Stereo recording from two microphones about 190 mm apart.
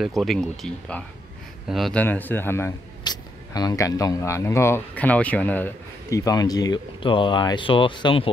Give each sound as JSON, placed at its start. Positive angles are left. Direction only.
{"t": 0.0, "sound": "a man's voice", "side_deg": 0}